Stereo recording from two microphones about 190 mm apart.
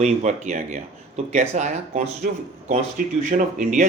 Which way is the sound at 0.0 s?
40° right (ahead or behind).